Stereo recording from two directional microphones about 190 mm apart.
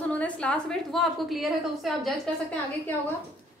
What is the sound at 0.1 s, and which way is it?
A woman's voice, 5° left (ahead or behind).